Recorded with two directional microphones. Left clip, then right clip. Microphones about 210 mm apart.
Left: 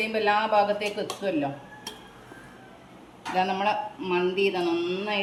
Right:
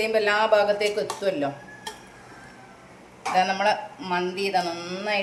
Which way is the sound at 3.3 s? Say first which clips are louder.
Right 3 dB; 50° right (ahead or behind).